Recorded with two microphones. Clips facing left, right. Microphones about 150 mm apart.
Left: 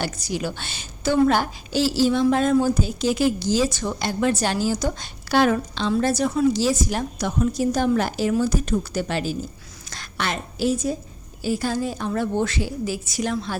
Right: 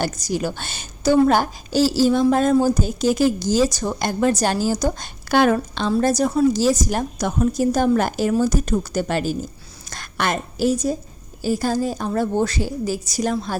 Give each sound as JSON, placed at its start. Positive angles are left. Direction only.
{"t": 0.0, "sound": "a woman's voice", "side_deg": -40}